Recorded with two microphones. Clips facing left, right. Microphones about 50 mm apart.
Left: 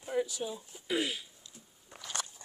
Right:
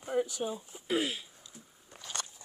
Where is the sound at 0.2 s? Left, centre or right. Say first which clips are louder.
Right 2 dB; right.